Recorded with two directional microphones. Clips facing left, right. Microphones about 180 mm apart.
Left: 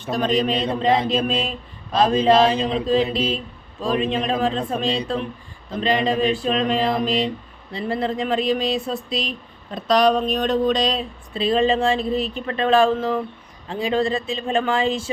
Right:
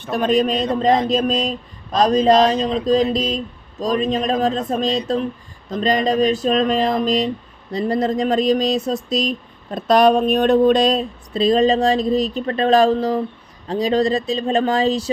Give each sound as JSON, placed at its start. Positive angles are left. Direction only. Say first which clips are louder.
{"t": 0.1, "sound": "speech", "louder": "right 3 dB", "side_deg": -50}